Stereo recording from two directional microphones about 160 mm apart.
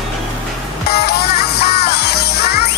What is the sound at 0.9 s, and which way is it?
Music, 80° left.